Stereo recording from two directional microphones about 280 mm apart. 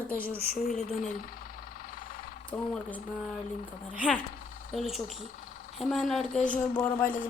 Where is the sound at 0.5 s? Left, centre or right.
Left.